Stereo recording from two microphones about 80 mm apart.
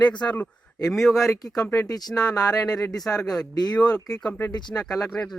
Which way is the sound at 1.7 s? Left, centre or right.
Left.